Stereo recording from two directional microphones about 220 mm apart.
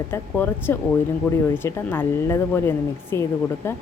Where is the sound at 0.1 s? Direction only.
10° left (ahead or behind).